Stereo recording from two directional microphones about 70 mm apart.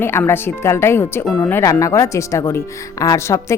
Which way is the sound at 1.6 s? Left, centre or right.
Left.